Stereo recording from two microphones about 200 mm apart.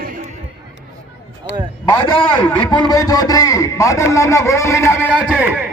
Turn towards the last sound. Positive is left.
turn(degrees=-5)  # may be behind; listen again after turning